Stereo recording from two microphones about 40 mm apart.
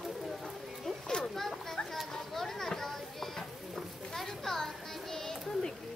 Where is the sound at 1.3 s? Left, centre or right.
Centre.